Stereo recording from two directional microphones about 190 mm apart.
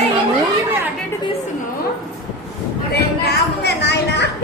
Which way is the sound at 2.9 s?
60° left (ahead or behind).